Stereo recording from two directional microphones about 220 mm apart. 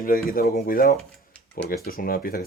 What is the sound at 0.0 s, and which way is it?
Speech, 45° left (ahead or behind).